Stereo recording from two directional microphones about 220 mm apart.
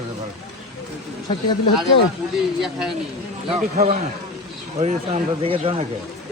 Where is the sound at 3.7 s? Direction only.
30° right (ahead or behind).